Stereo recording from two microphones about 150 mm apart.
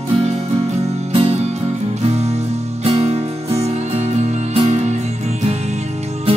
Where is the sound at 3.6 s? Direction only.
45° right (ahead or behind).